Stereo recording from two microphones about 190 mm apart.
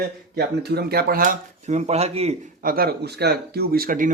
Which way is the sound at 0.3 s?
55° right (ahead or behind).